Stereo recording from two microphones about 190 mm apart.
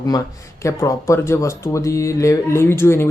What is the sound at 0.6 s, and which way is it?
Speech, 15° left (ahead or behind).